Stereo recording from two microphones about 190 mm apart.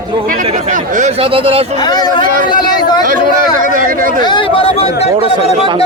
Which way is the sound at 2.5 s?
20° left (ahead or behind).